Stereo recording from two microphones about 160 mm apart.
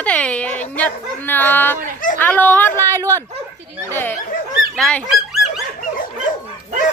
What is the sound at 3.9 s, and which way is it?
Speech, 10° left (ahead or behind).